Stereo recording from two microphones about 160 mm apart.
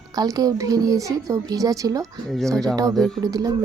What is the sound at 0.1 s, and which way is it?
A child's voice, 25° right (ahead or behind).